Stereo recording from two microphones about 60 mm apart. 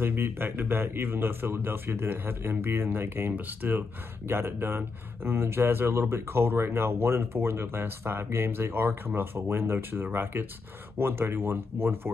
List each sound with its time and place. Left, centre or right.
0.0 s speech: right